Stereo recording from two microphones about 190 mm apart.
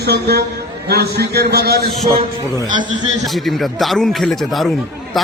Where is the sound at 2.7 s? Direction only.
25° right (ahead or behind).